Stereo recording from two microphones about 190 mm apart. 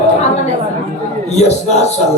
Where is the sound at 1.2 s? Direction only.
35° left (ahead or behind).